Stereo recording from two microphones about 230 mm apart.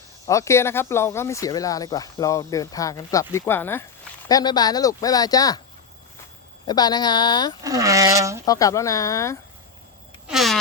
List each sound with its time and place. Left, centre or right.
0.3 s speech: centre
6.7 s speech: centre
7.6 s speech: centre
8.4 s speech: centre
10.2 s cat: centre